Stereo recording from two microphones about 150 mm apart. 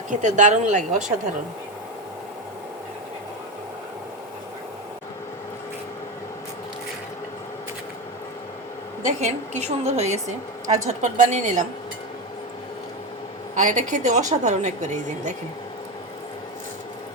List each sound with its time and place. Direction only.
0.1 s speech: 55° right (ahead or behind)
9.0 s a woman's voice: 50° right (ahead or behind)
13.6 s a woman's voice: 60° right (ahead or behind)